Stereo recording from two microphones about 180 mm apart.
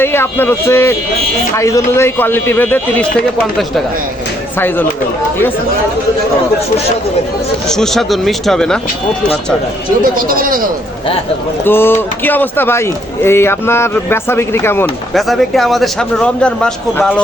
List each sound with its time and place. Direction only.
0.0 s speech: 10° left (ahead or behind)
4.5 s speech: 10° left (ahead or behind)
7.7 s speech: centre (ahead or behind)
10.0 s speech: 55° right (ahead or behind)
11.6 s speech: 10° left (ahead or behind)
15.1 s speech: centre (ahead or behind)